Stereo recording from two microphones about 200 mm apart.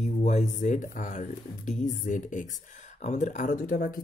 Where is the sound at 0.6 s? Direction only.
40° left (ahead or behind).